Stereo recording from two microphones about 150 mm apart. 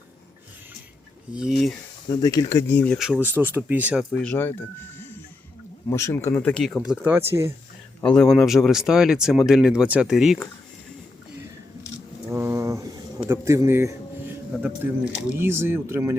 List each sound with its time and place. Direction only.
1.3 s speech: 5° right (ahead or behind)
2.0 s speech: 25° left (ahead or behind)
3.0 s speech: 10° right (ahead or behind)
4.1 s speech: 10° left (ahead or behind)
5.9 s speech: 20° left (ahead or behind)
6.5 s speech: 5° left (ahead or behind)
6.9 s speech: 15° right (ahead or behind)
8.0 s speech: 5° left (ahead or behind)
12.3 s a sound: 15° right (ahead or behind)
13.2 s speech: 20° right (ahead or behind)
15.4 s speech: 15° right (ahead or behind)